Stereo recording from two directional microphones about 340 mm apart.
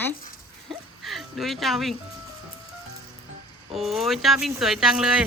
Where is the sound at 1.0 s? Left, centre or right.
Centre.